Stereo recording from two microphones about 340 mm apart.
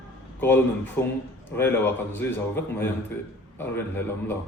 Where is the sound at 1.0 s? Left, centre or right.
Centre.